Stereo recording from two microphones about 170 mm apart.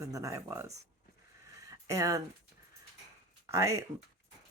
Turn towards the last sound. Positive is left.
turn(degrees=-20)  # may be behind; listen again after turning